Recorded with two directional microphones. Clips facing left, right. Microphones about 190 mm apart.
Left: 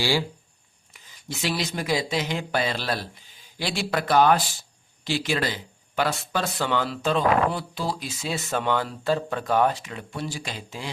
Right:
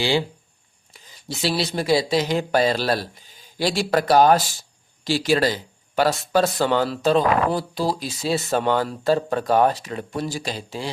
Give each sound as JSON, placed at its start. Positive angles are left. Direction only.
{"t": 0.0, "sound": "speech", "side_deg": -20}
{"t": 0.9, "sound": "speech", "side_deg": -30}